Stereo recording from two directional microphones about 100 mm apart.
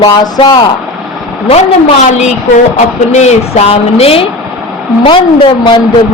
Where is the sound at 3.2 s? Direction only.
90° left.